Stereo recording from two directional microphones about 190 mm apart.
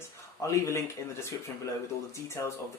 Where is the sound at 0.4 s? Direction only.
15° left (ahead or behind).